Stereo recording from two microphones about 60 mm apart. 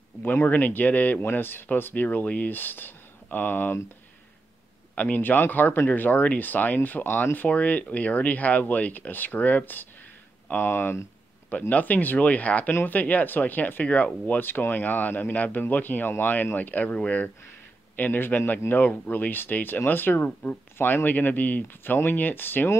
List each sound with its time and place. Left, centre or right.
0.2 s speech: left
4.9 s speech: left
10.5 s speech: left
11.7 s speech: left